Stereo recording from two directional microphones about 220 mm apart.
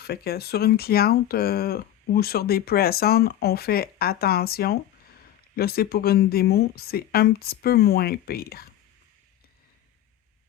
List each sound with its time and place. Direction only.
0.0 s speech: 45° left (ahead or behind)